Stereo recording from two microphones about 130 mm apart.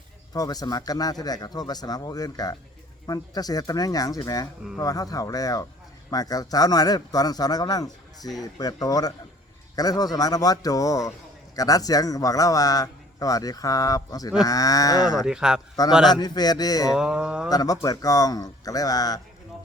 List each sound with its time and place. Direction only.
0.3 s a man's voice: 30° left (ahead or behind)
15.0 s speech: 5° right (ahead or behind)
16.1 s speech: 30° left (ahead or behind)
16.9 s mantra: 5° right (ahead or behind)
17.5 s a man's voice: 30° left (ahead or behind)